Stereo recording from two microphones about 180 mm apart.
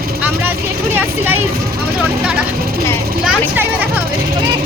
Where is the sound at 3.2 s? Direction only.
10° right (ahead or behind).